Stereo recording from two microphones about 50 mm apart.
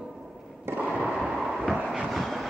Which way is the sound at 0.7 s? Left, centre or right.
Right.